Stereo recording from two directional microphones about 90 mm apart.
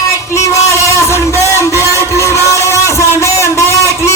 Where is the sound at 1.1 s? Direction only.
35° left (ahead or behind).